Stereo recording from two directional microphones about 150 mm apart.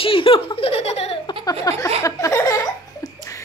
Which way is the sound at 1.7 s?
25° left (ahead or behind).